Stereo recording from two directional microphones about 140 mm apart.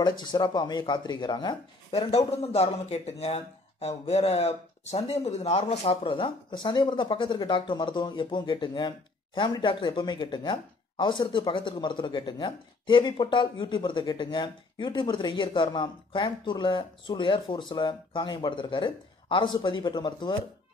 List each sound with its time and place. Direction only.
0.0 s a man's voice: 35° left (ahead or behind)
1.9 s a man's voice: 45° left (ahead or behind)